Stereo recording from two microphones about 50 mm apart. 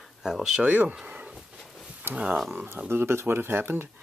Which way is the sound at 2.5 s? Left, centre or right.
Right.